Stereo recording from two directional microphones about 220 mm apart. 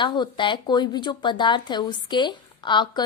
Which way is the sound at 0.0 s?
20° left (ahead or behind).